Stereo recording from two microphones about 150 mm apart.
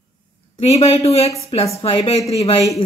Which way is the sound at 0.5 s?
45° left (ahead or behind).